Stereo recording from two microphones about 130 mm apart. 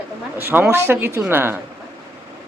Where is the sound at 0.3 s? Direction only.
15° right (ahead or behind).